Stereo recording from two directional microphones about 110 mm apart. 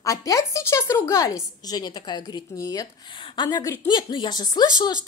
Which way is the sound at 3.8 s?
45° left (ahead or behind).